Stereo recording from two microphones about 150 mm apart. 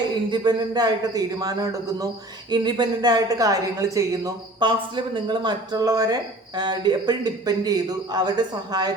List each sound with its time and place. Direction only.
0.3 s a woman's voice: 30° right (ahead or behind)